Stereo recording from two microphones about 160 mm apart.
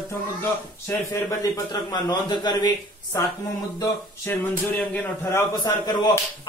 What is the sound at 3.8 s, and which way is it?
A man's voice, 10° left (ahead or behind).